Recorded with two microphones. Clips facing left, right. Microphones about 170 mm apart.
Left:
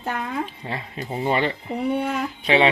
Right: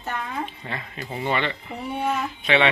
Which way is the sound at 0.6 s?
30° left (ahead or behind).